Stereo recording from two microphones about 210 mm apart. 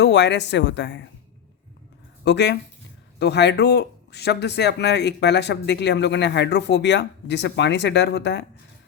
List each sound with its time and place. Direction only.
0.0 s speech: 55° left (ahead or behind)
2.2 s speech: 55° left (ahead or behind)